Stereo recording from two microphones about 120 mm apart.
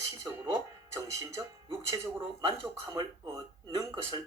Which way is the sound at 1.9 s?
25° right (ahead or behind).